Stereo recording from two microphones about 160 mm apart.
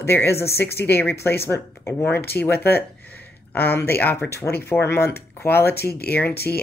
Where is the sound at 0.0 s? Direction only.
15° left (ahead or behind).